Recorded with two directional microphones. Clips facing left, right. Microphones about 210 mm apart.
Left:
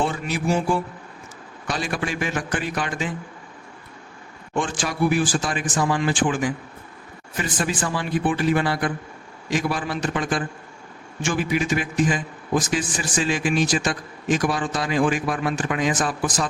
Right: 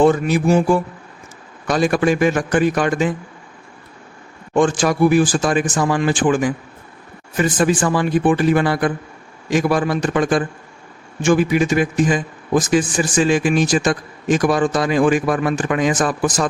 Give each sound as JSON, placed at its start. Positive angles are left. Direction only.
{"t": 0.0, "sound": "a man's voice", "side_deg": -45}
{"t": 4.5, "sound": "a man's voice", "side_deg": -45}
{"t": 7.3, "sound": "a man's voice", "side_deg": -50}